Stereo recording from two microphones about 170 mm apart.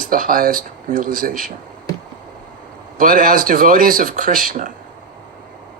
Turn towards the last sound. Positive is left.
turn(degrees=-55)  # may be behind; listen again after turning